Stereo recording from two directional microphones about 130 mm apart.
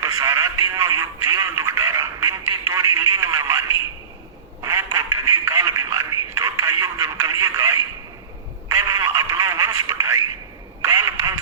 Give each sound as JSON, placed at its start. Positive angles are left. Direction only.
{"t": 0.0, "sound": "speech", "side_deg": -25}
{"t": 4.6, "sound": "speech", "side_deg": -20}
{"t": 8.8, "sound": "speech", "side_deg": -20}
{"t": 10.8, "sound": "quack", "side_deg": -20}